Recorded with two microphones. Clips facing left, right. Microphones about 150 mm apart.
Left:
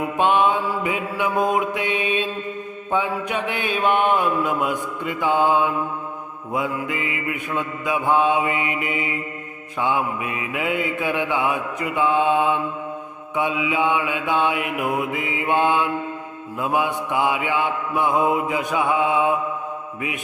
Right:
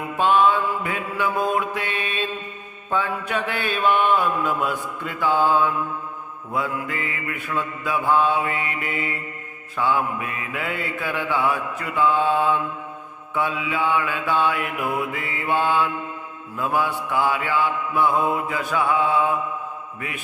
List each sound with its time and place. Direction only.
0.2 s mantra: 15° left (ahead or behind)